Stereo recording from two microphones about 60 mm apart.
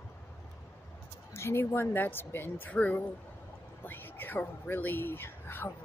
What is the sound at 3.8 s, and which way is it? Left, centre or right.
Speech, left.